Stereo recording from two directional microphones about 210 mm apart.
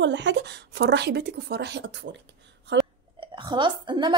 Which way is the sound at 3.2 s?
25° right (ahead or behind).